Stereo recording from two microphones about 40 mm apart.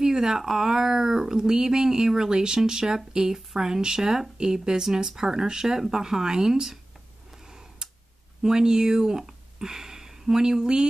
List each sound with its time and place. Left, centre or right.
0.0 s speech: centre
7.8 s a sound: right
8.4 s speech: centre